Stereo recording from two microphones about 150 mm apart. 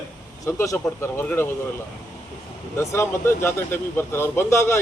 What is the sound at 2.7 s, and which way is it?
Speech, 15° left (ahead or behind).